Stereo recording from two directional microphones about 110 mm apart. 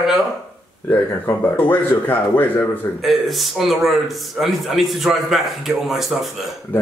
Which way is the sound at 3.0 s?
Centre (ahead or behind).